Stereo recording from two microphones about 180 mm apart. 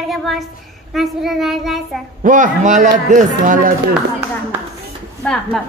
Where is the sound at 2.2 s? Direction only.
45° right (ahead or behind).